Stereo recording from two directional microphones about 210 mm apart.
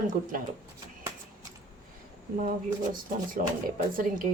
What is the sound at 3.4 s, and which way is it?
Speech, 40° right (ahead or behind).